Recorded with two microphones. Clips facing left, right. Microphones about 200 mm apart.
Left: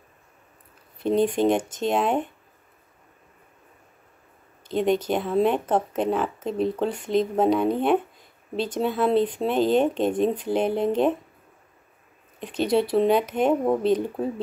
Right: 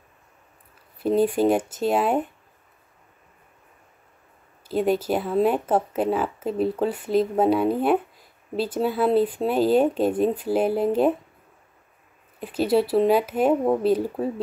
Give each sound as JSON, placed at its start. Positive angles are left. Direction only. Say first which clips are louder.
{"t": 0.9, "sound": "speech", "louder": "right 1 dB", "side_deg": -5}
{"t": 4.6, "sound": "speech", "louder": "even", "side_deg": -5}
{"t": 12.4, "sound": "speech", "louder": "right 1 dB", "side_deg": -5}